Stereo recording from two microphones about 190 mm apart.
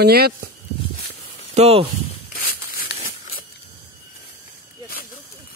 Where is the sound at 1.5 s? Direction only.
30° right (ahead or behind).